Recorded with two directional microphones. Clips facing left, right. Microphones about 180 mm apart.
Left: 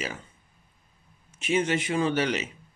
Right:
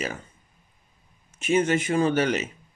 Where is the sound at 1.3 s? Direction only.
45° right (ahead or behind).